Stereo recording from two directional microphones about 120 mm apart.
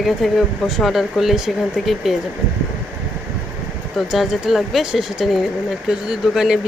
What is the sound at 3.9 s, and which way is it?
Speech, centre (ahead or behind).